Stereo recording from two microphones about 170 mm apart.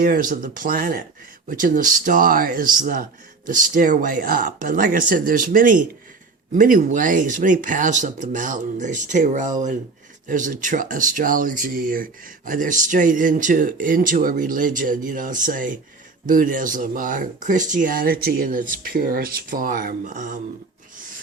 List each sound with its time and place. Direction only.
0.0 s speech: 55° right (ahead or behind)